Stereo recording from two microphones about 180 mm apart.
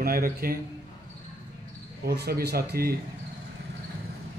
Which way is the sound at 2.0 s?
60° right (ahead or behind).